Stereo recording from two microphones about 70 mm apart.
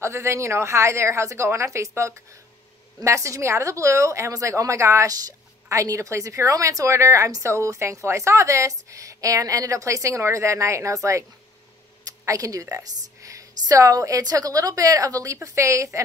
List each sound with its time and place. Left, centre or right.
0.0 s a woman's voice: right
12.0 s a sound: right
12.7 s a woman's voice: right